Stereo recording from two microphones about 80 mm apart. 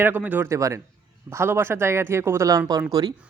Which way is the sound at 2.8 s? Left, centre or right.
Right.